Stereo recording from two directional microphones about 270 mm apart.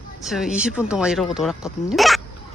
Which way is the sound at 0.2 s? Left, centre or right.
Centre.